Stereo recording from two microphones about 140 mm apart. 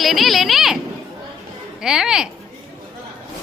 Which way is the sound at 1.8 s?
5° right (ahead or behind).